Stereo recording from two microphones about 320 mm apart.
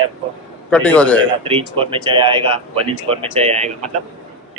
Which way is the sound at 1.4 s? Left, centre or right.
Centre.